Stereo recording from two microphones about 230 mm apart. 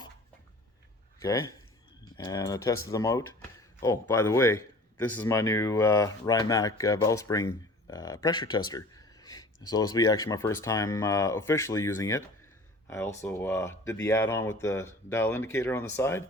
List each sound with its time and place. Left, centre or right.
1.2 s speech: centre
13.2 s speech: centre